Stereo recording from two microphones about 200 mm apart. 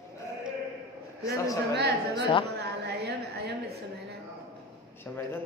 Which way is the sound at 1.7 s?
55° right (ahead or behind).